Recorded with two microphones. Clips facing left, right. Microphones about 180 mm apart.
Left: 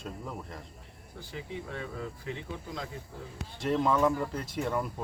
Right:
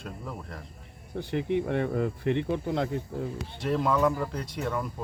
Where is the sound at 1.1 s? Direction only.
65° right (ahead or behind).